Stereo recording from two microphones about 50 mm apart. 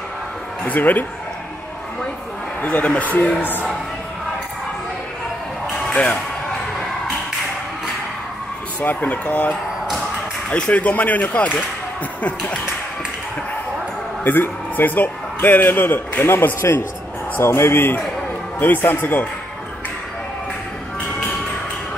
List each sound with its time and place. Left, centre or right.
0.7 s speech: left
2.6 s speech: left
5.9 s music: left
8.8 s speech: left
14.2 s a man's voice: left
17.4 s a man's voice: left
18.6 s speech: left